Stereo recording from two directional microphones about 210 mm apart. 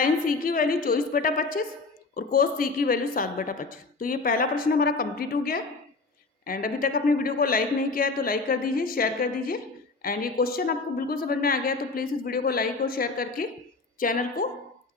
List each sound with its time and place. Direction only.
0.0 s a woman's voice: 40° left (ahead or behind)